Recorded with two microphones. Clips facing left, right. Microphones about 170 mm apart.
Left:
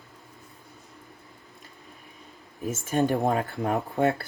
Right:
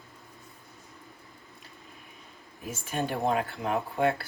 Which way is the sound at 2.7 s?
45° left (ahead or behind).